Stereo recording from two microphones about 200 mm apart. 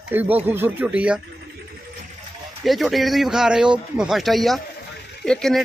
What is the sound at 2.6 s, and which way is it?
Speech, centre (ahead or behind).